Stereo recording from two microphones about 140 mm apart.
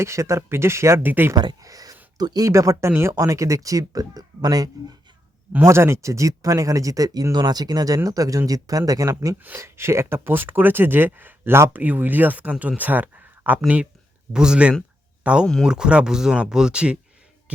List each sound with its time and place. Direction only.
0.0 s speech: 20° right (ahead or behind)
1.4 s speech: 25° right (ahead or behind); by 17.0 s 5° right (ahead or behind)